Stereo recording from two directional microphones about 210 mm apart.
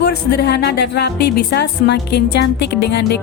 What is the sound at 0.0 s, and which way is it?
Speech, 50° left (ahead or behind).